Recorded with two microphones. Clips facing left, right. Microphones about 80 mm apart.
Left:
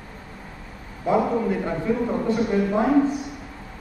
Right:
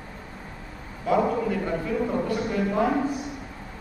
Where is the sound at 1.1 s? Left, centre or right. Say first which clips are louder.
Left 2 dB; left.